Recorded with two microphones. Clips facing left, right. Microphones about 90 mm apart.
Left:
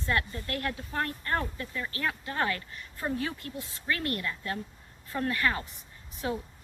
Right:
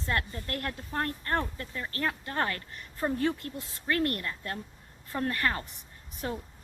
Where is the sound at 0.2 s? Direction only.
45° right (ahead or behind).